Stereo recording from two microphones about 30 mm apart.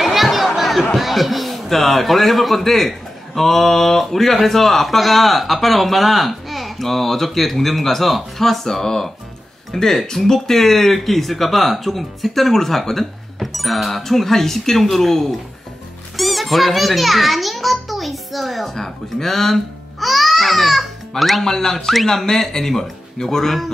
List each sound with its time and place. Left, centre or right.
0.0 s a sound: centre
0.6 s chatter: centre
0.9 s a man's voice: centre
22.0 s speech: centre